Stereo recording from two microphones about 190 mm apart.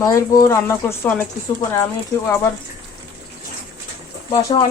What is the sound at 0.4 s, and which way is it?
Speech, 15° left (ahead or behind).